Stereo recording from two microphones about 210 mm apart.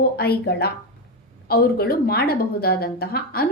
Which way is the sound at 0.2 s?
50° left (ahead or behind).